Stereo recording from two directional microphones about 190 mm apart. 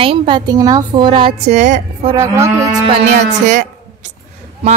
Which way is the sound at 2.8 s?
40° right (ahead or behind).